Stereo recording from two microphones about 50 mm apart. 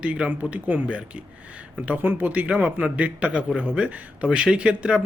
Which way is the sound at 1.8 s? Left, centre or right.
Right.